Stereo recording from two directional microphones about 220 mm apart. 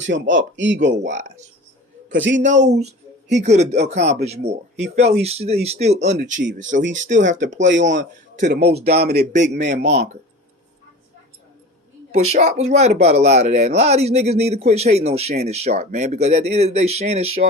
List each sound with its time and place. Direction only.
0.0 s speech: 55° right (ahead or behind)
1.0 s speech: 30° right (ahead or behind)
2.0 s a man's voice: 55° right (ahead or behind)
2.4 s speech: 35° right (ahead or behind)
8.4 s a man's voice: 45° right (ahead or behind)
9.8 s a man's voice: 50° right (ahead or behind)
12.1 s speech: 30° right (ahead or behind)